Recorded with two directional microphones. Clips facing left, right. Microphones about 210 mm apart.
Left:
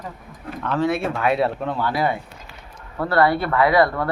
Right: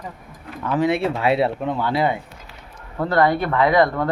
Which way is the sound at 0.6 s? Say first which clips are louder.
Right 2 dB; 15° right (ahead or behind).